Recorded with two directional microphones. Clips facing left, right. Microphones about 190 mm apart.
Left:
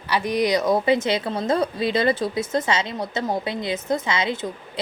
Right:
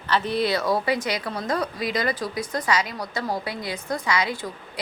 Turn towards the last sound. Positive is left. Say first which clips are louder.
# left 4 dB
turn(degrees=25)  # may be behind; listen again after turning